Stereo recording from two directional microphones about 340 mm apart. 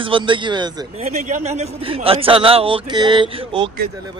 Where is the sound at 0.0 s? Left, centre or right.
Centre.